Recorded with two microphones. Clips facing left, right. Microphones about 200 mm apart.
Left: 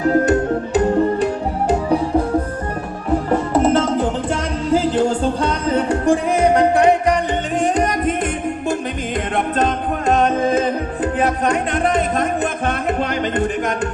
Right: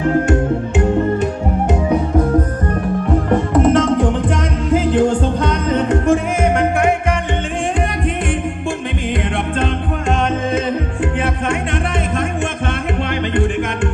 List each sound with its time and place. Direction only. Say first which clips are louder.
0.0 s music: even; 35° left (ahead or behind)
3.5 s music: right 3 dB; 30° left (ahead or behind)
9.6 s music: left 1 dB; 40° left (ahead or behind)
12.6 s music: left 1 dB; 40° left (ahead or behind)